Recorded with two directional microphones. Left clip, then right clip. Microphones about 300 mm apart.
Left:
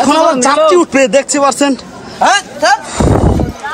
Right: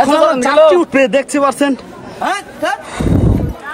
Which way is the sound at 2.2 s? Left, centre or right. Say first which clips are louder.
Left 8 dB; left.